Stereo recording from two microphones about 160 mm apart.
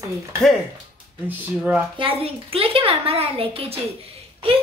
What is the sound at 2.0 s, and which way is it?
A child's voice, 35° right (ahead or behind).